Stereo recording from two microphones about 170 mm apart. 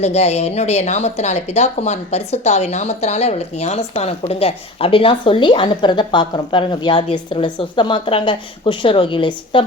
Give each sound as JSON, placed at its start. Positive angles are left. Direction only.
{"t": 0.0, "sound": "speech", "side_deg": 40}